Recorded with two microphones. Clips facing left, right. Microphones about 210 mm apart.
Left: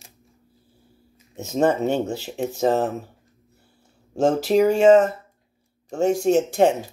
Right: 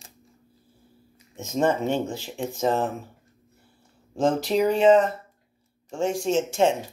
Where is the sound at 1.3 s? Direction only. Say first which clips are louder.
Left 3 dB; 40° left (ahead or behind).